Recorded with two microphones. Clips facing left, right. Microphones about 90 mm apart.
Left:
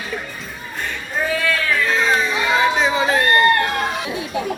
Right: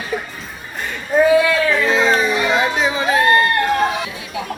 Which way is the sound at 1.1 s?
Centre (ahead or behind).